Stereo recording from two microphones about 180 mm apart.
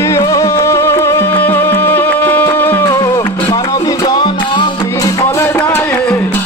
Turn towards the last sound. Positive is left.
turn(degrees=10)  # may be behind; listen again after turning